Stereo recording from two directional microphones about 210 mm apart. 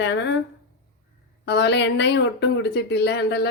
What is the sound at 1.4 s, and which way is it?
Speech, 55° left (ahead or behind).